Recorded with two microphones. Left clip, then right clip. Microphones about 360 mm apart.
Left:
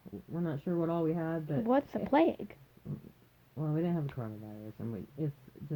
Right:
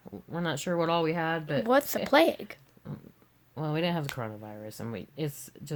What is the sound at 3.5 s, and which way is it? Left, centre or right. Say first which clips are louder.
Speech: right 5 dB; right.